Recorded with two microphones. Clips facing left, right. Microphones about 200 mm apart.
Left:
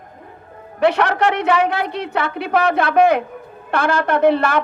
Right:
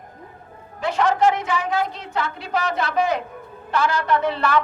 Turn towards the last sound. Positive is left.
turn(degrees=50)  # may be behind; listen again after turning